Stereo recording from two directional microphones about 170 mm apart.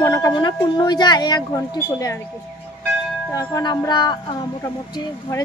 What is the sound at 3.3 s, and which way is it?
Speech, 20° left (ahead or behind).